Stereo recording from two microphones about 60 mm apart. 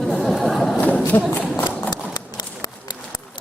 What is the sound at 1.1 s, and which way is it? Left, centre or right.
Speech, left.